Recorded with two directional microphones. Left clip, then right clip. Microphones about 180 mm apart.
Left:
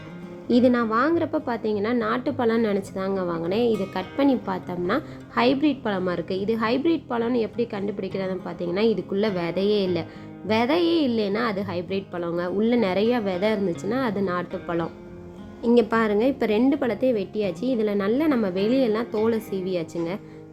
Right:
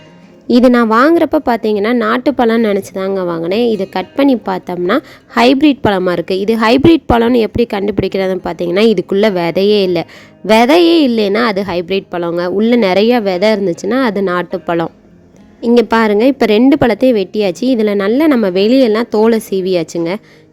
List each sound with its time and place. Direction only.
0.4 s a woman's voice: 50° right (ahead or behind)